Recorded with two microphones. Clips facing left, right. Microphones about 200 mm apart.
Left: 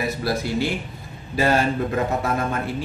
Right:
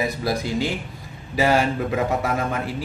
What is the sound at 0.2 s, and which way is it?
A man's voice, 15° right (ahead or behind).